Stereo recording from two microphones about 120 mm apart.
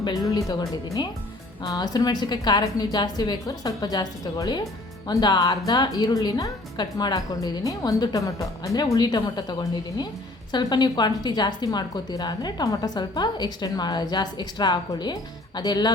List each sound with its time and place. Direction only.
0.0 s a woman's voice: 30° left (ahead or behind)
1.6 s a woman's voice: 30° left (ahead or behind)